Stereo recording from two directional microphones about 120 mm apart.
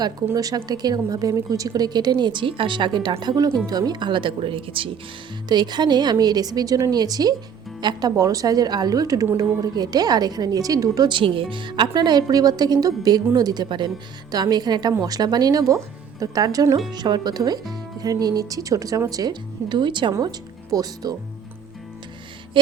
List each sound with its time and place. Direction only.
0.3 s a woman's voice: 30° right (ahead or behind); by 4.9 s 45° right (ahead or behind)
5.5 s a woman's voice: 35° right (ahead or behind)
20.1 s speech: 30° right (ahead or behind)
22.5 s a sound: 45° right (ahead or behind)